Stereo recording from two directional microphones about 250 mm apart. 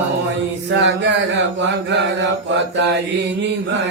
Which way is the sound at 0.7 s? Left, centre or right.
Right.